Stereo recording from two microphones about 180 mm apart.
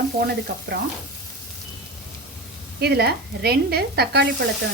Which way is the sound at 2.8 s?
65° right (ahead or behind).